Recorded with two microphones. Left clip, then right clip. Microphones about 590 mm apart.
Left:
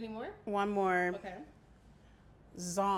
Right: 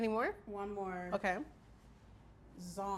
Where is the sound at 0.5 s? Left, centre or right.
Left.